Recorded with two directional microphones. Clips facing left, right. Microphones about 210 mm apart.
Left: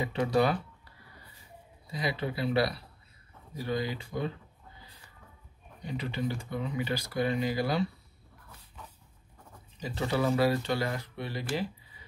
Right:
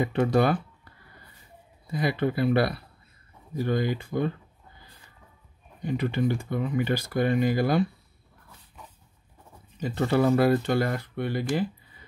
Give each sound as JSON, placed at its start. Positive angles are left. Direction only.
{"t": 0.0, "sound": "speech", "side_deg": -50}
{"t": 1.9, "sound": "speech", "side_deg": -55}
{"t": 5.9, "sound": "speech", "side_deg": -55}
{"t": 9.8, "sound": "speech", "side_deg": -55}